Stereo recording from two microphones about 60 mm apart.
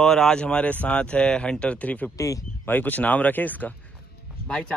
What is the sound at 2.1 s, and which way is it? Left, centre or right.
Speech, left.